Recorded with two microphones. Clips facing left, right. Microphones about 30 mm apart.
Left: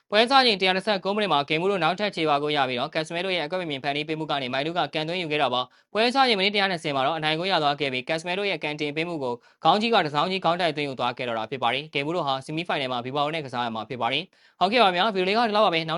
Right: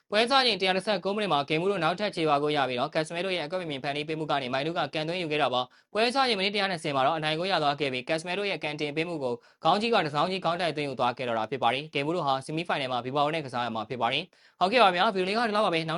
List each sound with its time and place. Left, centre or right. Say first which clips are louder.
0.1 s speech: left 5 dB; centre
2.0 s speech: left 3 dB; left
2.5 s speech: left 2 dB; left
9.8 s speech: left 3 dB; left